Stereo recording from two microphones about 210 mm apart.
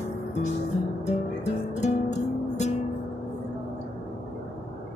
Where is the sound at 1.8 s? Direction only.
30° left (ahead or behind).